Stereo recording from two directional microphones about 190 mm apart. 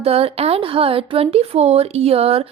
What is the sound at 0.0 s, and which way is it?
A woman's voice, 30° right (ahead or behind).